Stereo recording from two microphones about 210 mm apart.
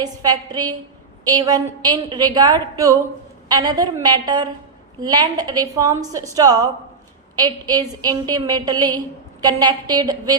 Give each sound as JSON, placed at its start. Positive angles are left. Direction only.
{"t": 0.0, "sound": "a woman's voice", "side_deg": -20}